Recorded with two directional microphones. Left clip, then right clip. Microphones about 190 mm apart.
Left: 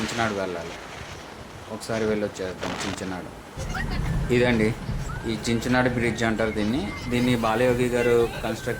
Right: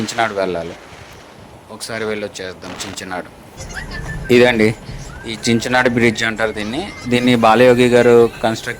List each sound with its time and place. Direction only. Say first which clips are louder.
0.2 s speech: right 9 dB; 45° right (ahead or behind)
1.8 s speech: right 3 dB; 45° right (ahead or behind)
2.6 s speech: right 1 dB; centre (ahead or behind)
4.3 s speech: right 11 dB; 50° right (ahead or behind)